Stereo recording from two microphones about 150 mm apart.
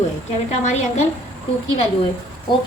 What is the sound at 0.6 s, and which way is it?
Speech, 50° left (ahead or behind).